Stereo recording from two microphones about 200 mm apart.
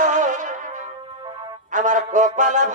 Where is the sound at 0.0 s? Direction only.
40° right (ahead or behind).